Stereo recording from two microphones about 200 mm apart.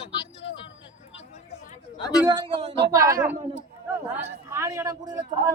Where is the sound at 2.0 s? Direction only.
20° left (ahead or behind).